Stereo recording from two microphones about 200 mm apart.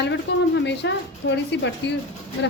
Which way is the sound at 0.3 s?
60° left (ahead or behind).